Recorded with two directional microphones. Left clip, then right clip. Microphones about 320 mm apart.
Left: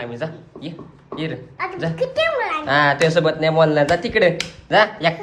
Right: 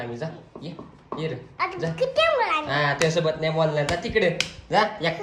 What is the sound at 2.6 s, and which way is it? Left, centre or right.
A child's voice, centre.